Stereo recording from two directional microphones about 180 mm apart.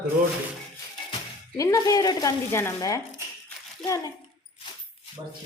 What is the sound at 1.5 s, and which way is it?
Speech, 20° left (ahead or behind).